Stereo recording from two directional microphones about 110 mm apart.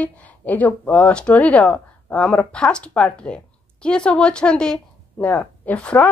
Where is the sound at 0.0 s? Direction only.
15° left (ahead or behind).